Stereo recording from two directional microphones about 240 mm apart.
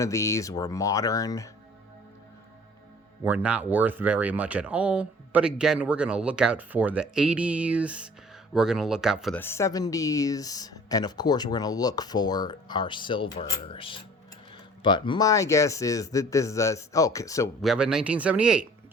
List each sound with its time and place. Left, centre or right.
0.0 s speech: centre
3.2 s speech: centre
17.6 s speech: centre